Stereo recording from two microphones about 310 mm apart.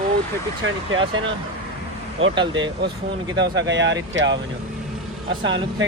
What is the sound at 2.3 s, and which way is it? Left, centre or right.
Speech, centre.